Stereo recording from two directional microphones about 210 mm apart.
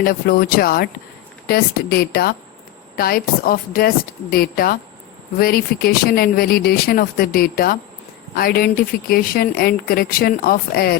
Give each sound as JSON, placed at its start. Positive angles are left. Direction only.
{"t": 0.0, "sound": "speech", "side_deg": 45}